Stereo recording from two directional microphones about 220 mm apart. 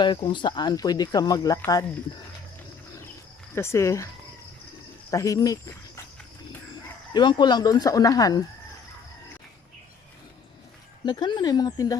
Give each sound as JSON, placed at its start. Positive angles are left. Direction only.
{"t": 0.0, "sound": "speech", "side_deg": 20}
{"t": 3.5, "sound": "speech", "side_deg": 10}
{"t": 5.1, "sound": "speech", "side_deg": 15}
{"t": 7.1, "sound": "speech", "side_deg": 20}
{"t": 11.0, "sound": "speech", "side_deg": 20}